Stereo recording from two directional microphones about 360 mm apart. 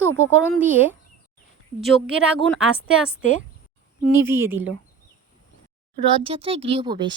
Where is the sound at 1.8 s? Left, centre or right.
Centre.